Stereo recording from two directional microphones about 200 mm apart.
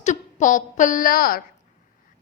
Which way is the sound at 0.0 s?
40° left (ahead or behind).